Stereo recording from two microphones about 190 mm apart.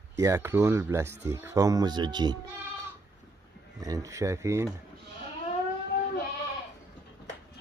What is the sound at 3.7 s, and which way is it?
Speech, 20° right (ahead or behind).